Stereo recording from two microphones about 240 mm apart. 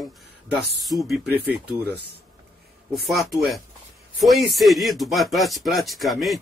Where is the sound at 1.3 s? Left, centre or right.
Right.